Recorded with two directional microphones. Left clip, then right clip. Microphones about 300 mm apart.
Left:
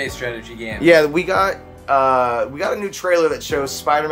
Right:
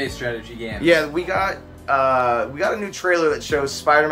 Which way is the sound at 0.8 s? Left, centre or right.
Centre.